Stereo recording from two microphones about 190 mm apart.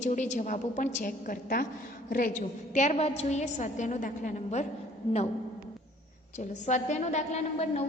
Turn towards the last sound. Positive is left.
turn(degrees=35)  # may be behind; listen again after turning